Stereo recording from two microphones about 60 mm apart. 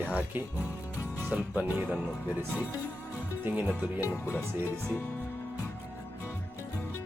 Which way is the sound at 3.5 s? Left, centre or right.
Right.